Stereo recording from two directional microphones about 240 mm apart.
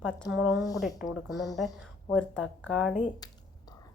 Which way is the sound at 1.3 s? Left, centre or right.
Centre.